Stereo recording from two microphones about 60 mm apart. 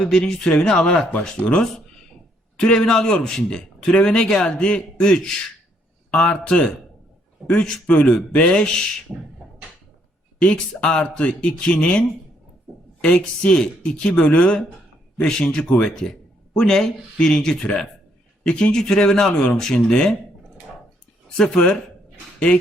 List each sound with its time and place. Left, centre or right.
0.0 s a man's voice: centre
10.4 s a man's voice: centre
21.2 s speech: centre